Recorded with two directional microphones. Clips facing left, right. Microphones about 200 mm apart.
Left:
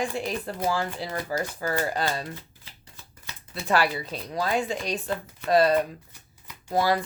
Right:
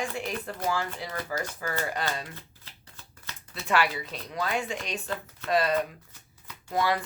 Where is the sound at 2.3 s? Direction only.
15° left (ahead or behind).